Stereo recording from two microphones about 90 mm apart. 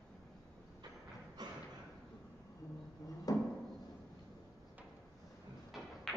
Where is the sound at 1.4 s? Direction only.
50° right (ahead or behind).